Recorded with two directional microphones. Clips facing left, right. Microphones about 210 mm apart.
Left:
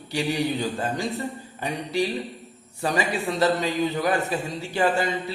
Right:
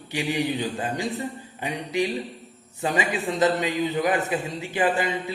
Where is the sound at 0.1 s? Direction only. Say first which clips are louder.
Left 1 dB; 15° right (ahead or behind).